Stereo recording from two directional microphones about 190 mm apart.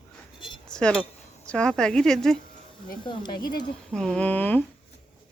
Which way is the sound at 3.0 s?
25° left (ahead or behind).